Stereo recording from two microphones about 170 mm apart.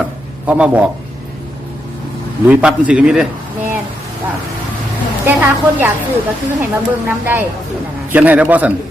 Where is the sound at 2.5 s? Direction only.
5° right (ahead or behind).